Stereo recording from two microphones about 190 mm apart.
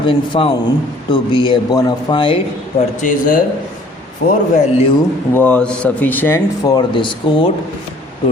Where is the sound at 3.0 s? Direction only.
45° left (ahead or behind).